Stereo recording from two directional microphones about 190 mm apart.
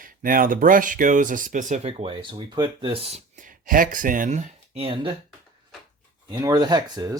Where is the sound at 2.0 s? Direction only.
25° right (ahead or behind).